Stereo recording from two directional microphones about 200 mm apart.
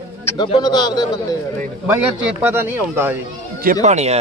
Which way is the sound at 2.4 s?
10° right (ahead or behind).